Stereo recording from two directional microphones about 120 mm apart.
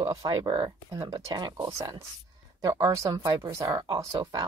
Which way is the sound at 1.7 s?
25° right (ahead or behind).